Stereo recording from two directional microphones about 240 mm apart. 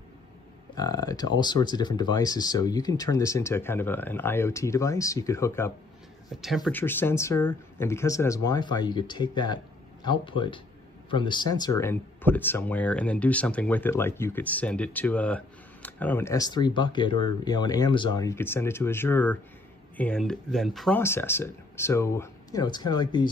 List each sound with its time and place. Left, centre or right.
0.7 s speech: centre
6.3 s speech: centre